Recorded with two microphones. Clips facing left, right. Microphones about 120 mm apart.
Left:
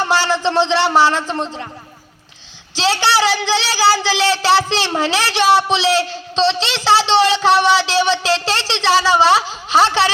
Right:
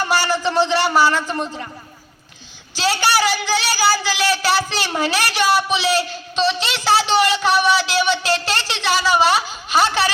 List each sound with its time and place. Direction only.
0.0 s a man's voice: 25° left (ahead or behind)
2.7 s a woman's voice: 25° left (ahead or behind)